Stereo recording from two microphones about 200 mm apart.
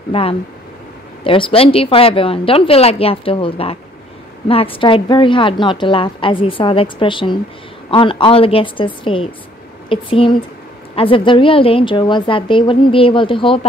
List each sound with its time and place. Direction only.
0.1 s a woman's voice: 30° left (ahead or behind)